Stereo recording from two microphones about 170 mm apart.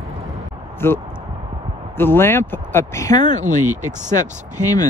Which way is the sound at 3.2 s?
45° right (ahead or behind).